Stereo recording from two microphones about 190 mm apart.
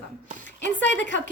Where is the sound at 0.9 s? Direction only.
70° left (ahead or behind).